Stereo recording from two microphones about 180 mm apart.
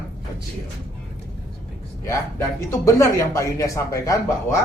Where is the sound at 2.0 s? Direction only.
15° left (ahead or behind).